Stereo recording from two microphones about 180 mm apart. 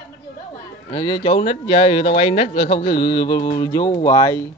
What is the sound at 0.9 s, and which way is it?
Speech, 25° left (ahead or behind).